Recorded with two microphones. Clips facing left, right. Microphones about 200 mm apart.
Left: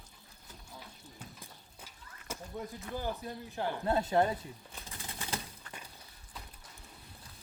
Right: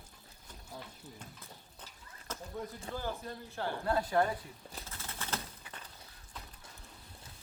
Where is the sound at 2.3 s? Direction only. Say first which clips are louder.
Left 1 dB; 10° left (ahead or behind).